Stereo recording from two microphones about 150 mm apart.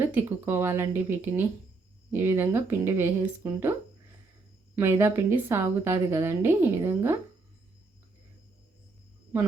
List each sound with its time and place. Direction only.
0.0 s a woman's voice: 15° right (ahead or behind)